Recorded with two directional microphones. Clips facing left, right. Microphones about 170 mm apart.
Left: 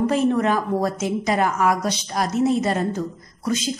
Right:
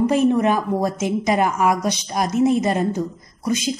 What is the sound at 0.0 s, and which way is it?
A woman's voice, 15° right (ahead or behind).